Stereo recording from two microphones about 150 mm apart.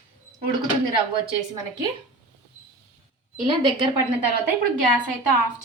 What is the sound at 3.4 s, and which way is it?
Speech, 35° right (ahead or behind).